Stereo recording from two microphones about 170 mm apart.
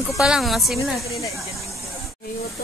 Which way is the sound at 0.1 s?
Centre (ahead or behind).